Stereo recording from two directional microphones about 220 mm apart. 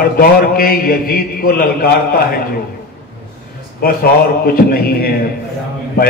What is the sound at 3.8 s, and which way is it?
A man's voice, 45° left (ahead or behind).